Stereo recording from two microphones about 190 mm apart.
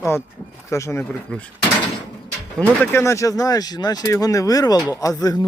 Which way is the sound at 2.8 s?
15° left (ahead or behind).